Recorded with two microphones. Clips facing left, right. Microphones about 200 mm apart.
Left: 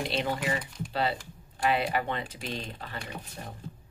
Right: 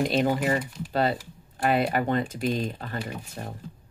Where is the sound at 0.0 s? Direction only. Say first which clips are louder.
Right 7 dB; 45° right (ahead or behind).